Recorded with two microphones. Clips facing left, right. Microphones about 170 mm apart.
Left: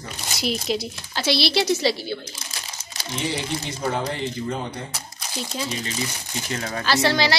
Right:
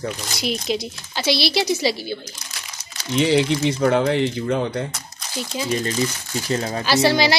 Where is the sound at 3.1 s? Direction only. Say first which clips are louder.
Right 10 dB; 85° right.